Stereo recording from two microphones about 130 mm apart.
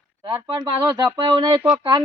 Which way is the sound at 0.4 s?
35° right (ahead or behind).